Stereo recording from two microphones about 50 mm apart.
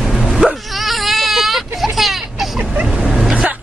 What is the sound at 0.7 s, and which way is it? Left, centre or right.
Baby cry, centre.